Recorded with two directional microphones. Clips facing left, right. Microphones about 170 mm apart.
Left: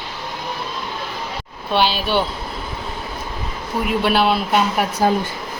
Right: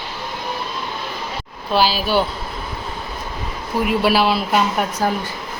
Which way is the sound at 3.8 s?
Centre (ahead or behind).